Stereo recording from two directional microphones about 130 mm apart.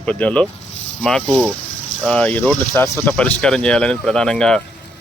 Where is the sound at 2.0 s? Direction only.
10° left (ahead or behind).